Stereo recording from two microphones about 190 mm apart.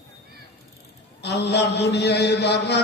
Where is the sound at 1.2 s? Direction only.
60° left (ahead or behind).